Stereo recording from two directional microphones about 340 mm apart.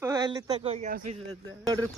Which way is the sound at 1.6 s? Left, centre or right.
Centre.